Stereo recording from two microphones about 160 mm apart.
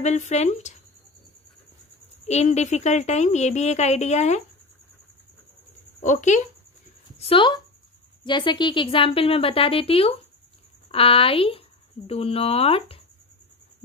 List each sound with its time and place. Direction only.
0.0 s speech: 45° left (ahead or behind)
2.2 s speech: 45° left (ahead or behind)
6.0 s speech: 50° left (ahead or behind)
7.2 s a woman's voice: 35° left (ahead or behind)